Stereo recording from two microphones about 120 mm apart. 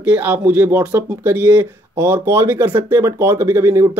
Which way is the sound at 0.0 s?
15° right (ahead or behind).